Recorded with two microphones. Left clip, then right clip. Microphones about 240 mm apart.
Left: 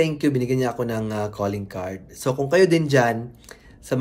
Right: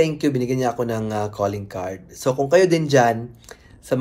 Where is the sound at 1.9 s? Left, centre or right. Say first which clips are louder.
Right 1 dB; right.